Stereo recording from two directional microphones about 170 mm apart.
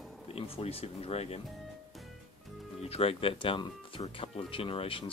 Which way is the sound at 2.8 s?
35° left (ahead or behind).